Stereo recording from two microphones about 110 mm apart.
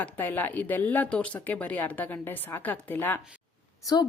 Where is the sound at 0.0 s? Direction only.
15° left (ahead or behind).